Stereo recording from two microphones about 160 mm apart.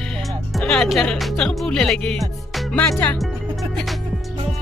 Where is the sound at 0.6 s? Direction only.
Centre (ahead or behind).